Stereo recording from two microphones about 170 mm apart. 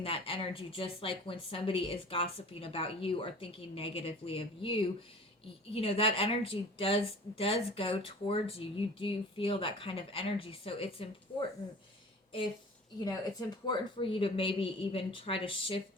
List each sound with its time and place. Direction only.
0.0 s speech: 30° left (ahead or behind)
13.7 s speech: 30° left (ahead or behind)